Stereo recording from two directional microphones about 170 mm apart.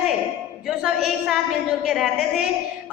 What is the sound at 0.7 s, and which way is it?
A woman's voice, centre (ahead or behind).